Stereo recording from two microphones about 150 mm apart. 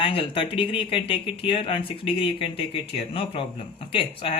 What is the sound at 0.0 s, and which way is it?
Speech, 35° left (ahead or behind).